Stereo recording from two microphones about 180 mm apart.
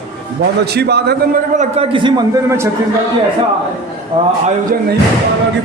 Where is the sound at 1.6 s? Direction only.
35° right (ahead or behind).